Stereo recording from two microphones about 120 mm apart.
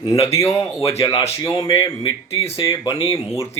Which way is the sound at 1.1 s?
60° left (ahead or behind).